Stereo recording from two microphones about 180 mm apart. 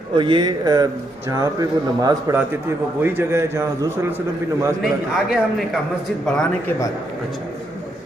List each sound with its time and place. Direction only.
0.1 s a man's voice: 25° right (ahead or behind)
5.1 s speech: centre (ahead or behind)